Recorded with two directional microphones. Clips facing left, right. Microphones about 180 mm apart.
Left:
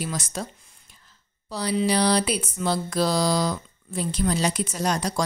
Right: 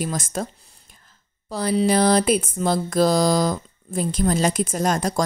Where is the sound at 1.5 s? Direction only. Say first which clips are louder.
Right 4 dB; 50° right (ahead or behind).